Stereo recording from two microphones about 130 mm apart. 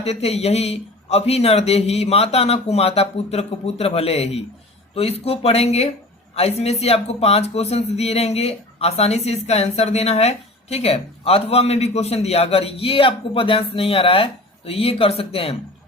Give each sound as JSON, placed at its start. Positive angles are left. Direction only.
{"t": 0.0, "sound": "speech", "side_deg": 50}